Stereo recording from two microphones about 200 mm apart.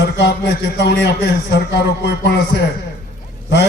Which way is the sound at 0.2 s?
55° left (ahead or behind).